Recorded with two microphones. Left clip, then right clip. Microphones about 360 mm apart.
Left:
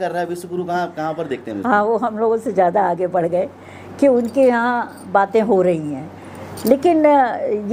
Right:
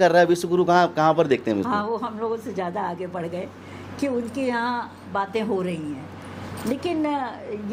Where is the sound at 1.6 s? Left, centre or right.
Left.